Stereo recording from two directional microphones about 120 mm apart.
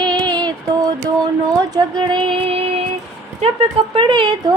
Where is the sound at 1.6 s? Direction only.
35° right (ahead or behind).